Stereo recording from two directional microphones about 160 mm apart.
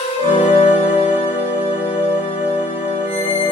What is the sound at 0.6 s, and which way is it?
Music, 40° left (ahead or behind).